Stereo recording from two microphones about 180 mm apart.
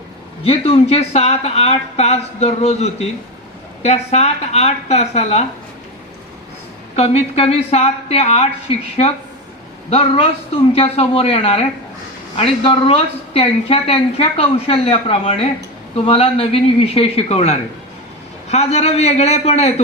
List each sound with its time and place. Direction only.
0.4 s a woman's voice: 35° left (ahead or behind)
6.9 s a woman's voice: 35° left (ahead or behind)
10.7 s a woman's voice: 30° left (ahead or behind)